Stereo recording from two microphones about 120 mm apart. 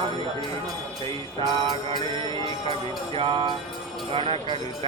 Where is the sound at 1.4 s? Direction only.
40° right (ahead or behind).